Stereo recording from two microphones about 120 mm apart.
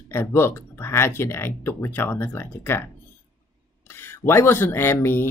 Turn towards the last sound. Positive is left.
turn(degrees=20)  # may be behind; listen again after turning